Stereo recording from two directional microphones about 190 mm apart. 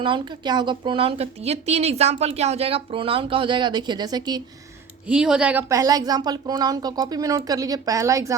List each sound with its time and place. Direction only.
0.0 s a woman's voice: 25° right (ahead or behind)
5.0 s a woman's voice: 5° right (ahead or behind)